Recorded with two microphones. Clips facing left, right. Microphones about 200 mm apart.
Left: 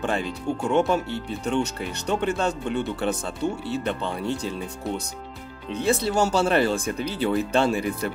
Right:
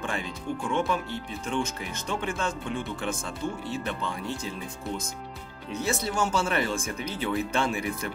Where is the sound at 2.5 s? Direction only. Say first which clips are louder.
Left 6 dB; 70° left (ahead or behind).